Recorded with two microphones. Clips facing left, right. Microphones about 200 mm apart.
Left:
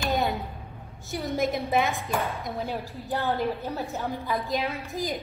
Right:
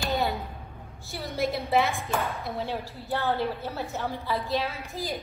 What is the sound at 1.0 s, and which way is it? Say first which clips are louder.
A woman's voice: left 2 dB; 15° left (ahead or behind).